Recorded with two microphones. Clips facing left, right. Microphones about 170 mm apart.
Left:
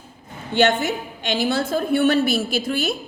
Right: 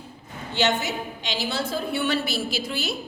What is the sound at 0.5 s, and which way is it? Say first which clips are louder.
A woman's voice: left 6 dB; 55° left (ahead or behind).